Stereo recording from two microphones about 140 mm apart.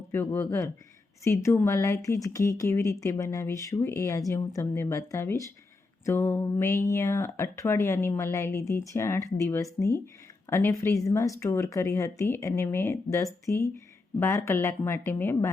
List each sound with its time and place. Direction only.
0.3 s speech: 15° left (ahead or behind)